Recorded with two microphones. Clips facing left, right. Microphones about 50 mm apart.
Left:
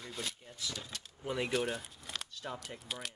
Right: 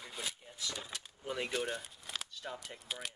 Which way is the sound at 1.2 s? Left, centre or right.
Centre.